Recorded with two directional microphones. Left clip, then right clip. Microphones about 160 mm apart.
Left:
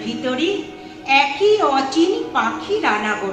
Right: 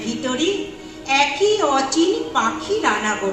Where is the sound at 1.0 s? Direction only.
20° left (ahead or behind).